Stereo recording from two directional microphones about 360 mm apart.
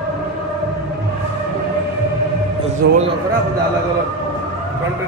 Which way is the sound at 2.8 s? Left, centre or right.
Right.